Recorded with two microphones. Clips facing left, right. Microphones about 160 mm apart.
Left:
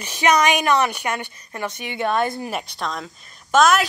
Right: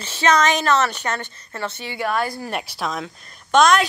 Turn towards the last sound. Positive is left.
turn(degrees=5)  # may be behind; listen again after turning